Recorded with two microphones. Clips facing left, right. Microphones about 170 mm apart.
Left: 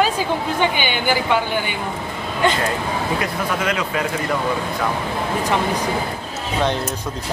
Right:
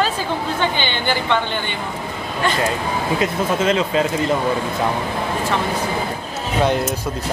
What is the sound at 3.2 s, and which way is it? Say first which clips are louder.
Speech: right 3 dB; 25° right (ahead or behind).